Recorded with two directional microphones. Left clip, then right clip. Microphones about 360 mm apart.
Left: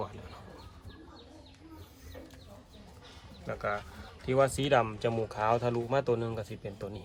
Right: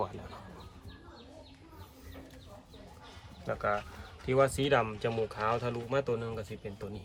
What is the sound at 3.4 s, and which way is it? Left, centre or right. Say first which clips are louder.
Speech: right 2 dB; centre.